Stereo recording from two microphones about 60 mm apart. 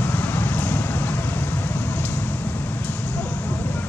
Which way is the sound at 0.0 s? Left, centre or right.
Left.